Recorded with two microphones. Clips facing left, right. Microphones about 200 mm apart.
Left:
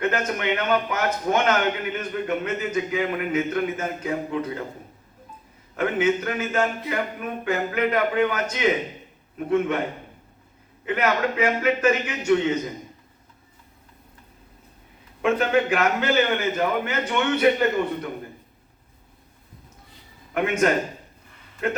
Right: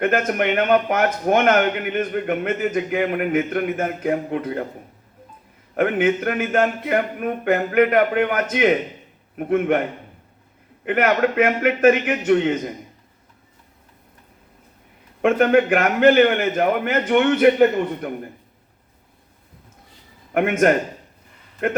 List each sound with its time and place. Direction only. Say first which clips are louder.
0.0 s a man's voice: right 5 dB; 50° right (ahead or behind)
5.7 s a man's voice: right 3 dB; 55° right (ahead or behind)
10.8 s a man's voice: right 5 dB; 55° right (ahead or behind)
15.2 s a man's voice: right 5 dB; 55° right (ahead or behind)
20.3 s a man's voice: right 4 dB; 55° right (ahead or behind)